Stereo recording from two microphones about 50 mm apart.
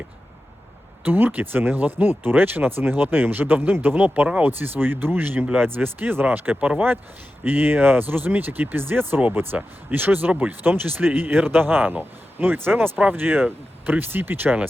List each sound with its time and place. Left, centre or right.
1.0 s speech: right
7.4 s speech: right